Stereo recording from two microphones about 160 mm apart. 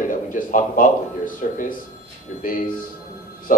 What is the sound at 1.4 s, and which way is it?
Speech, 55° left (ahead or behind).